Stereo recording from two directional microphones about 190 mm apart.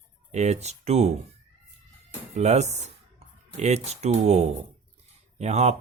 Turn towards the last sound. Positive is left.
turn(degrees=-35)  # may be behind; listen again after turning